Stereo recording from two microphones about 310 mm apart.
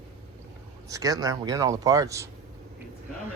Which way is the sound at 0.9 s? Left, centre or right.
Centre.